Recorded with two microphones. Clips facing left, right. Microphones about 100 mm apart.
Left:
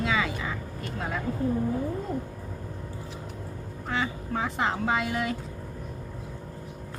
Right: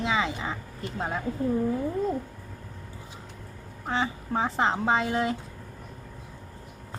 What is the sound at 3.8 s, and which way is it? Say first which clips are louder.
Speech: right 2 dB; 30° right (ahead or behind).